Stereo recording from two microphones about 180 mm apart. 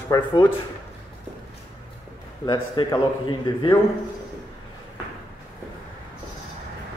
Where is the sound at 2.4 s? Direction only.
25° left (ahead or behind).